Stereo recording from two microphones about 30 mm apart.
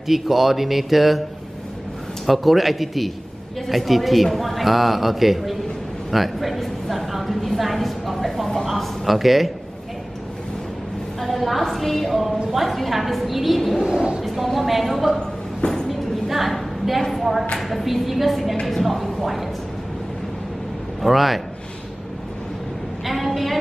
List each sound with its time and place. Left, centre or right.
0.1 s speech: centre
2.2 s a man's voice: centre
6.1 s a sound: centre
11.1 s a sound: centre
11.7 s a woman's voice: centre
12.1 s a man's voice: centre
13.7 s a woman's voice: right
14.2 s a man's voice: centre
15.6 s music: left
16.3 s a sound: centre
17.2 s a man's voice: centre
21.0 s a man's voice: centre
23.0 s a sound: centre